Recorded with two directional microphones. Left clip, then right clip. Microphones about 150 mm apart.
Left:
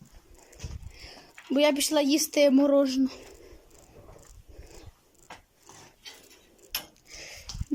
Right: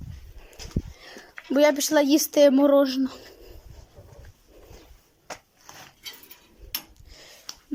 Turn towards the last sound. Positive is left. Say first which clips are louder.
# left 4 dB
turn(degrees=10)  # may be behind; listen again after turning